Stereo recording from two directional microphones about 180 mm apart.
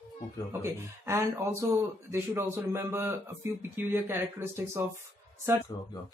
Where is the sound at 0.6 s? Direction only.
15° right (ahead or behind).